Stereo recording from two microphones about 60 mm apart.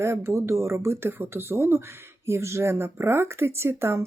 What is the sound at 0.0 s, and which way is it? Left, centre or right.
Speech, right.